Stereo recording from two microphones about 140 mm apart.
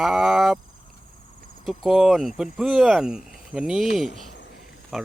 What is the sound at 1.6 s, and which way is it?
Speech, centre (ahead or behind).